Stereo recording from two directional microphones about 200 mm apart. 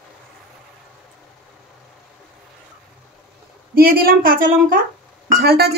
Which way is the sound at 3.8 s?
50° right (ahead or behind).